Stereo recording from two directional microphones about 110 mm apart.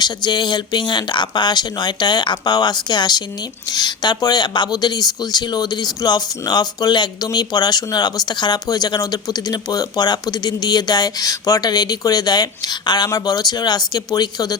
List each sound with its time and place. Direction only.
0.0 s speech: 40° left (ahead or behind)